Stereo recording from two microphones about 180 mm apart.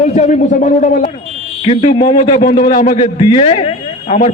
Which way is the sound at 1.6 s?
35° left (ahead or behind).